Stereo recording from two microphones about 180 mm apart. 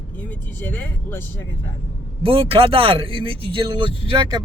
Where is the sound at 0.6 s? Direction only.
10° left (ahead or behind).